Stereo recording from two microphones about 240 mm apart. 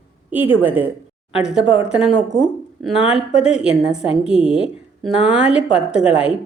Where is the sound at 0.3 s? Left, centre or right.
Centre.